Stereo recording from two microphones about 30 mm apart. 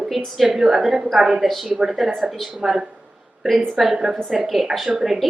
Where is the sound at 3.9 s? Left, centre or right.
Centre.